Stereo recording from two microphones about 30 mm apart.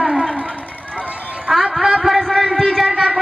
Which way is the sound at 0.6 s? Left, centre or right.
Left.